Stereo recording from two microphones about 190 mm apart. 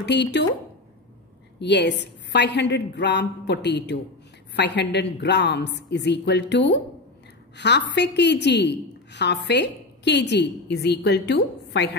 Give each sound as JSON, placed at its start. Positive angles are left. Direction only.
{"t": 0.0, "sound": "a woman's voice", "side_deg": 65}
{"t": 1.6, "sound": "a woman's voice", "side_deg": 65}